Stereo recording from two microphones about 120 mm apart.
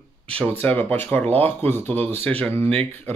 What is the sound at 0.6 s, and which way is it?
Speech, 15° left (ahead or behind).